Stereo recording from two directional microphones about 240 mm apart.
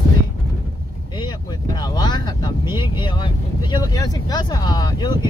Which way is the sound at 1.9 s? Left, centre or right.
Centre.